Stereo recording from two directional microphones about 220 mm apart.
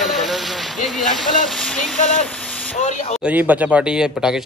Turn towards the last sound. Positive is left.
turn(degrees=-5)  # may be behind; listen again after turning